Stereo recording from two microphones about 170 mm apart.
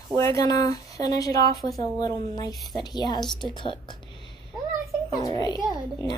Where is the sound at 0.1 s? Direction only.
20° left (ahead or behind).